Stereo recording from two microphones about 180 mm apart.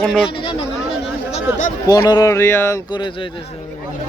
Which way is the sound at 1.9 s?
20° left (ahead or behind).